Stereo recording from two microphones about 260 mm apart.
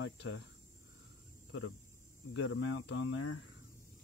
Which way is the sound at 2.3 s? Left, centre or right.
Left.